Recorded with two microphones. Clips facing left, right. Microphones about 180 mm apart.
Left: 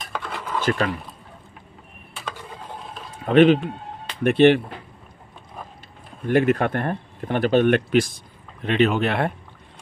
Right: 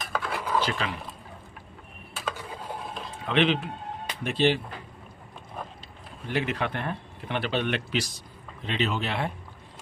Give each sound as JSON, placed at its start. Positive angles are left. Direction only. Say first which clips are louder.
{"t": 0.0, "sound": "a sound", "louder": "right 1 dB", "side_deg": 0}
{"t": 0.6, "sound": "speech", "louder": "left 8 dB", "side_deg": 50}
{"t": 2.1, "sound": "a sound", "louder": "right 1 dB", "side_deg": -5}
{"t": 3.3, "sound": "speech", "louder": "left 10 dB", "side_deg": 45}
{"t": 4.2, "sound": "speech", "louder": "left 10 dB", "side_deg": 60}
{"t": 6.2, "sound": "speech", "louder": "left 10 dB", "side_deg": 50}